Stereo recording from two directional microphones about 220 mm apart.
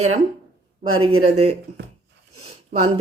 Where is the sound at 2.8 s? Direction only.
25° right (ahead or behind).